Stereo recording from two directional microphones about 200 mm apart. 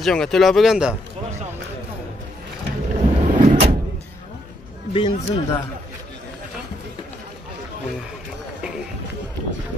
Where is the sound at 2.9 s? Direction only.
35° right (ahead or behind).